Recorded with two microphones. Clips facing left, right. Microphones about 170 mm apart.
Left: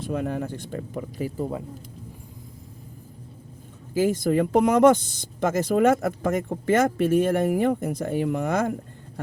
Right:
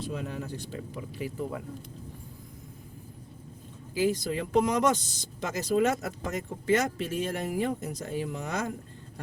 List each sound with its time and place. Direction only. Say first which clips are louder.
0.0 s speech: left 7 dB; 55° left (ahead or behind)
1.4 s speech: left 5 dB; 30° left (ahead or behind)
3.9 s speech: left 6 dB; 45° left (ahead or behind)